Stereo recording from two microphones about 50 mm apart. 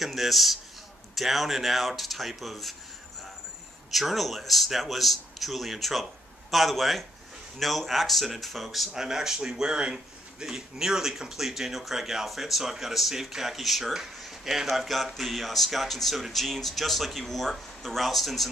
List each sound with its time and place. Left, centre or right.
0.0 s a sound: centre
1.1 s speech: centre
3.9 s speech: centre